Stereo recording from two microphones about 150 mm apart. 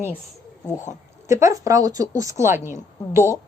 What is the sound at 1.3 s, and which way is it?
A woman's voice, 20° right (ahead or behind).